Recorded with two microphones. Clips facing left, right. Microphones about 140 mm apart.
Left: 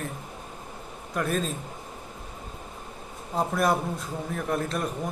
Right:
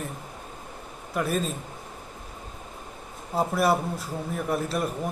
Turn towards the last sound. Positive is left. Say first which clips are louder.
# right 1 dB
turn(degrees=-5)  # may be behind; listen again after turning